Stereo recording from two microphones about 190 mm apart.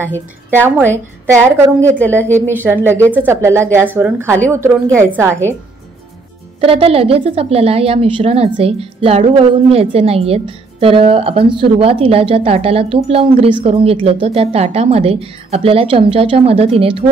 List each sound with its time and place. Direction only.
0.5 s speech: 10° right (ahead or behind)
1.8 s a woman's voice: 10° left (ahead or behind)
2.6 s speech: 10° right (ahead or behind)
6.6 s a woman's voice: 30° right (ahead or behind)